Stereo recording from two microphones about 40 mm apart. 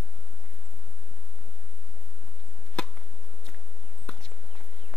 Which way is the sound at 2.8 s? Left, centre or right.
Left.